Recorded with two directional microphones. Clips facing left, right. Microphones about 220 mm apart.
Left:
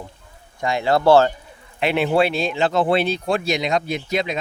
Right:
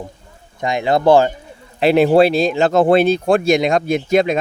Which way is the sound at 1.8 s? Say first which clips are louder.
Right 7 dB; 35° right (ahead or behind).